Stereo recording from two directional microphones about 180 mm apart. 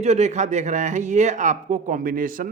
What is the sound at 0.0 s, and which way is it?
A man's voice, 40° right (ahead or behind).